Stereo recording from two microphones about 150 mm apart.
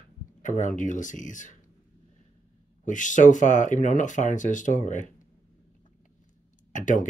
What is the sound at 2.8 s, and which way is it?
Speech, 55° left (ahead or behind).